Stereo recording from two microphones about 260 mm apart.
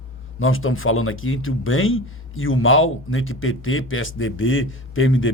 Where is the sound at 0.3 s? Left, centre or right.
Left.